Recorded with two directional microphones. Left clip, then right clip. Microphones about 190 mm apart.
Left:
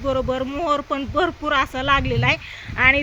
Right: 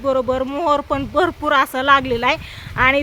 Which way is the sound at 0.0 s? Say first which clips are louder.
Right 4 dB; 25° right (ahead or behind).